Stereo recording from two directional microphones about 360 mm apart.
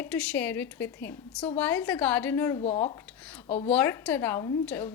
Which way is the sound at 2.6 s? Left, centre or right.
Centre.